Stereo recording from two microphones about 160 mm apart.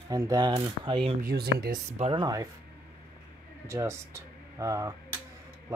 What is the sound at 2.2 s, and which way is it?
Speech, 20° right (ahead or behind).